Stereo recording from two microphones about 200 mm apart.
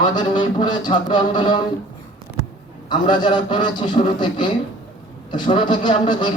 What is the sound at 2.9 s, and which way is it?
A man's voice, 20° left (ahead or behind).